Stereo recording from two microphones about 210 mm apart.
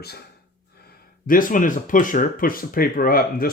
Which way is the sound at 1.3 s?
40° left (ahead or behind).